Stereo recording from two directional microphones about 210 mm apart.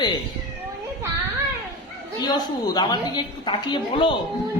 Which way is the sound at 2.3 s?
20° left (ahead or behind).